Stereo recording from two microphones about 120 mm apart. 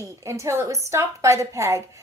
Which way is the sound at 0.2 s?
25° right (ahead or behind).